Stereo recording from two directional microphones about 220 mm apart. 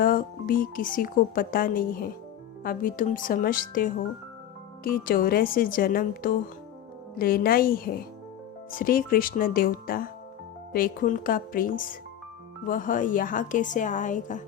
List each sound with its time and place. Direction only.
0.0 s speech: 40° left (ahead or behind)